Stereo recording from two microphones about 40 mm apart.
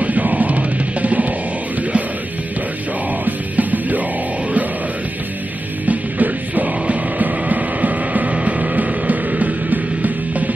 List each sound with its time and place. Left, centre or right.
0.0 s music: right
3.3 s music: right
5.9 s music: right
8.4 s music: right